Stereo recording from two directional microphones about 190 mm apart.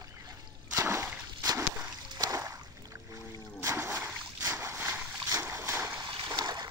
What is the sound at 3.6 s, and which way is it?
Splash, 15° right (ahead or behind).